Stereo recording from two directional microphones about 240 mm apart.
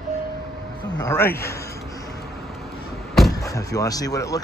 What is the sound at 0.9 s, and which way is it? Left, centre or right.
Speech, centre.